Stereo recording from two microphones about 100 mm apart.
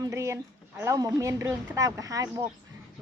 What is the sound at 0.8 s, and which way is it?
Speech, 35° right (ahead or behind).